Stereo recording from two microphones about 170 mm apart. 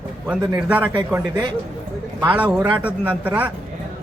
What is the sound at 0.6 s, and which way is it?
Speech, 10° right (ahead or behind).